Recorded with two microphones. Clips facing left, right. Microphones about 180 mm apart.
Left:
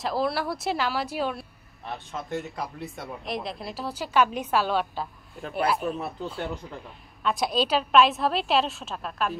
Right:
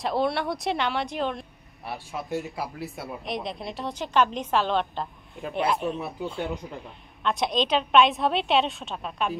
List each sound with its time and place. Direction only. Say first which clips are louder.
0.0 s speech: right 1 dB; centre (ahead or behind)
6.4 s speech: right 2 dB; 15° right (ahead or behind)
7.2 s speech: even; 5° left (ahead or behind)